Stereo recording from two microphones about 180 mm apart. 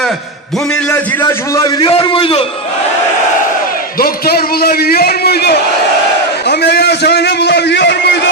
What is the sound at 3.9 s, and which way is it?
A man's voice, 55° left (ahead or behind).